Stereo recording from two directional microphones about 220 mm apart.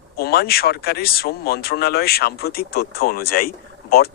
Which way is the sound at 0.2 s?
45° left (ahead or behind).